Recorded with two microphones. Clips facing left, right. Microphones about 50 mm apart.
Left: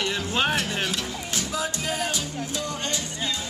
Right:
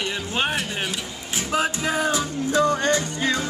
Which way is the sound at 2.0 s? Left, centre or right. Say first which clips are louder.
Right 6 dB; right.